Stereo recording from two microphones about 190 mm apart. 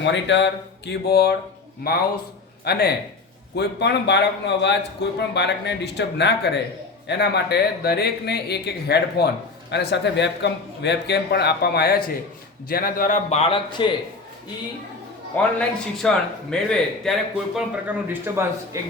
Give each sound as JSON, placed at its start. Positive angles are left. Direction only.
{"t": 0.0, "sound": "speech", "side_deg": 70}
{"t": 2.6, "sound": "a man's voice", "side_deg": 55}
{"t": 15.5, "sound": "a man's voice", "side_deg": 5}